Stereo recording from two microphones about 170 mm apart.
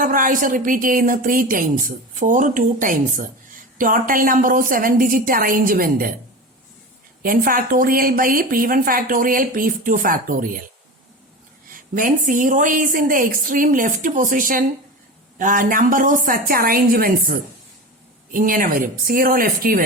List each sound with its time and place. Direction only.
0.0 s speech: 55° right (ahead or behind)
7.2 s a woman's voice: 55° right (ahead or behind)
11.7 s a woman's voice: 55° right (ahead or behind)